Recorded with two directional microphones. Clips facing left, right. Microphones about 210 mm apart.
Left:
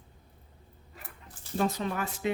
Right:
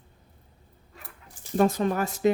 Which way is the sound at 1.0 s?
5° left (ahead or behind).